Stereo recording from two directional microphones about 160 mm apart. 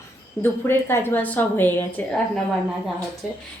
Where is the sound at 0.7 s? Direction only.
15° left (ahead or behind).